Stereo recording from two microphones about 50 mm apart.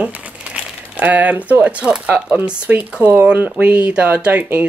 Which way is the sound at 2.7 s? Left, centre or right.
Right.